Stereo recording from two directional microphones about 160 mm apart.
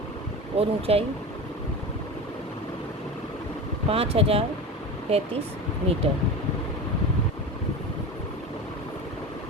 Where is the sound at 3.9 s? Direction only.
35° right (ahead or behind).